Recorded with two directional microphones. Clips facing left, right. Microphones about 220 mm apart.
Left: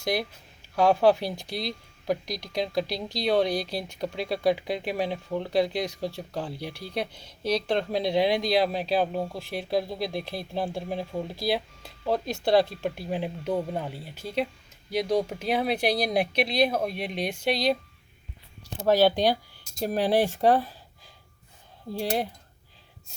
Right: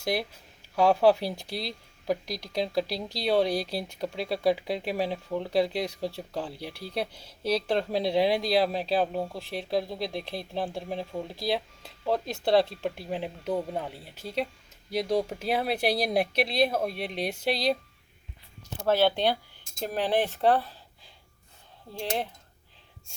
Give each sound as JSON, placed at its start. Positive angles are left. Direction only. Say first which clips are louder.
{"t": 0.8, "sound": "speech", "louder": "left 1 dB", "side_deg": -5}
{"t": 6.7, "sound": "speech", "louder": "left 1 dB", "side_deg": -30}
{"t": 6.9, "sound": "speech", "louder": "even", "side_deg": -5}
{"t": 18.9, "sound": "speech", "louder": "left 3 dB", "side_deg": 15}
{"t": 21.8, "sound": "speech", "louder": "left 4 dB", "side_deg": 35}